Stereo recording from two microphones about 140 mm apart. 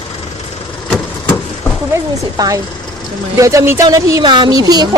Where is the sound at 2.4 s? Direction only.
25° right (ahead or behind).